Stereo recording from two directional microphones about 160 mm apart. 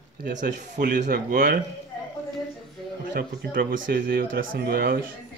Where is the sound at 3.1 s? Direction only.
70° right (ahead or behind).